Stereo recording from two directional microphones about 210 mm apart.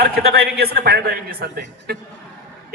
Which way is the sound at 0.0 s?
50° right (ahead or behind).